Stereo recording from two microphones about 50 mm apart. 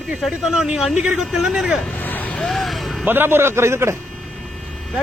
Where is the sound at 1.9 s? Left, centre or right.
Left.